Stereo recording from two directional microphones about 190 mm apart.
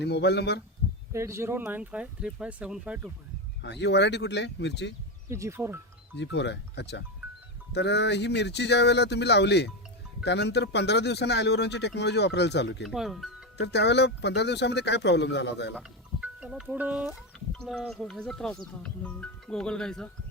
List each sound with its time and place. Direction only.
0.0 s speech: 60° left (ahead or behind)
1.1 s speech: 15° right (ahead or behind)
3.6 s speech: 65° left (ahead or behind)
5.3 s speech: 15° right (ahead or behind)
6.1 s speech: 65° left (ahead or behind)
12.8 s speech: centre (ahead or behind)
13.6 s speech: 65° left (ahead or behind)
16.2 s speech: 5° right (ahead or behind)